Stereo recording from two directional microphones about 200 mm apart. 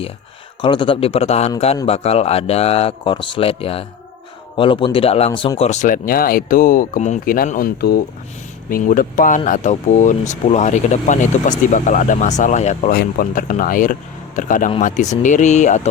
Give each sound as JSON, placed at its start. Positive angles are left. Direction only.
{"t": 0.6, "sound": "speech", "side_deg": 25}
{"t": 12.9, "sound": "speech", "side_deg": 45}